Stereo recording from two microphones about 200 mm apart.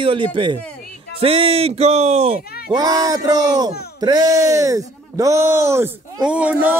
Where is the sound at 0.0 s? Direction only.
25° right (ahead or behind).